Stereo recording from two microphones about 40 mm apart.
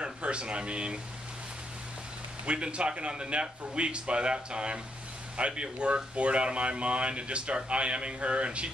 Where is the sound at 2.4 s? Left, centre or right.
Right.